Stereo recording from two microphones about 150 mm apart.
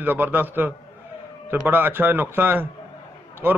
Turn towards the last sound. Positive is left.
turn(degrees=-10)  # may be behind; listen again after turning